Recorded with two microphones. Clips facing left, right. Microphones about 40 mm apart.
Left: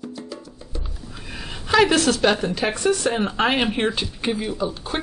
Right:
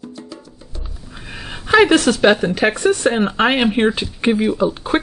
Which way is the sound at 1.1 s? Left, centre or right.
Centre.